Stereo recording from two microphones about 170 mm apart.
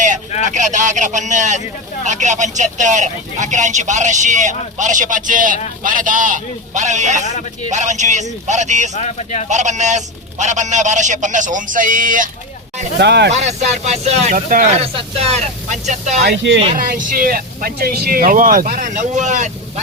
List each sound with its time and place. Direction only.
0.4 s speech: 45° right (ahead or behind)
9.0 s speech: 40° left (ahead or behind)
9.5 s speech: 45° right (ahead or behind)
13.0 s speech: 85° right
13.3 s speech: 40° right (ahead or behind)
16.2 s speech: 90° right
16.7 s speech: 55° right (ahead or behind)